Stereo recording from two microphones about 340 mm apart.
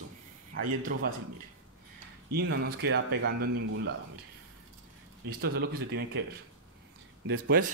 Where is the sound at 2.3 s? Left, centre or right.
Right.